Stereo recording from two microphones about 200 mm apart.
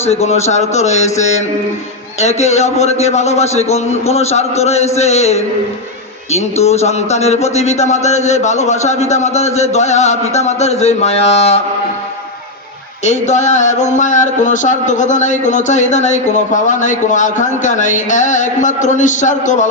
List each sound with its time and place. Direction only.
0.0 s speech: 30° left (ahead or behind)
13.1 s speech: 35° left (ahead or behind)